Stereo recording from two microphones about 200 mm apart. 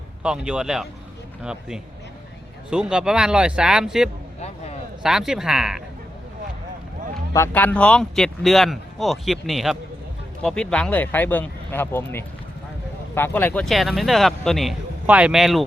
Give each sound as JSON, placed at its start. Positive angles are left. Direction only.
{"t": 0.2, "sound": "speech", "side_deg": -5}
{"t": 4.4, "sound": "a sound", "side_deg": 30}
{"t": 5.0, "sound": "speech", "side_deg": -5}
{"t": 7.3, "sound": "speech", "side_deg": 10}